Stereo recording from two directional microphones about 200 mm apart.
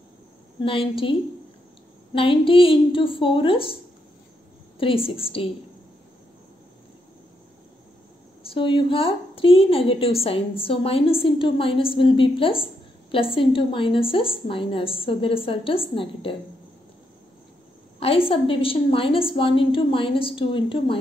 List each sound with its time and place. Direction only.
0.6 s a woman's voice: 25° left (ahead or behind)
2.1 s a woman's voice: 25° left (ahead or behind)
4.7 s a woman's voice: 25° left (ahead or behind)
8.5 s a woman's voice: 25° left (ahead or behind)
17.9 s a woman's voice: 30° left (ahead or behind)